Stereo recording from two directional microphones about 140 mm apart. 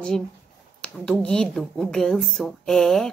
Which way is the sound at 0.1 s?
5° left (ahead or behind).